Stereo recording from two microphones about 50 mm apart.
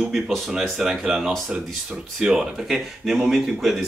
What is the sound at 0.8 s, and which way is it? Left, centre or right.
Speech, centre.